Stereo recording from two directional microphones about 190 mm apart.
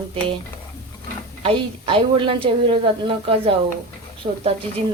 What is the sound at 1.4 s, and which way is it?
Speech, 25° right (ahead or behind).